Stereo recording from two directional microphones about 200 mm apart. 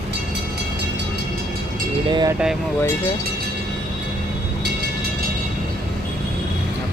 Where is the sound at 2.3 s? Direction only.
5° right (ahead or behind).